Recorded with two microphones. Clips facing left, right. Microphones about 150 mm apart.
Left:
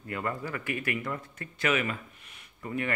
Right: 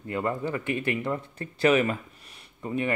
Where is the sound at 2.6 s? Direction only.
20° right (ahead or behind).